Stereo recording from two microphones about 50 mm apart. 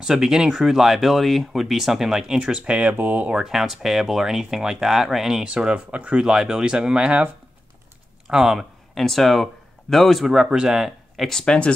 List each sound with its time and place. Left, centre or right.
0.0 s speech: centre
2.3 s speech: right
3.4 s speech: centre
5.5 s speech: centre
6.2 s speech: centre
8.3 s speech: centre
9.0 s speech: centre
11.2 s speech: centre